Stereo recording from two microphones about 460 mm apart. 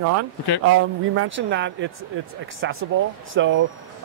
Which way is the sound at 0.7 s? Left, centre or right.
Right.